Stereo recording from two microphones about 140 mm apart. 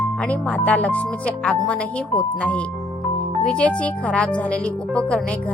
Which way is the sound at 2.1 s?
10° left (ahead or behind).